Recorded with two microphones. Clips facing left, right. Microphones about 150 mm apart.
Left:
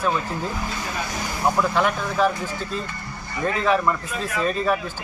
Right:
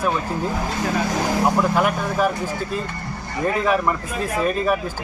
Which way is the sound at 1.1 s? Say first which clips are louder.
Right 8 dB; 90° right.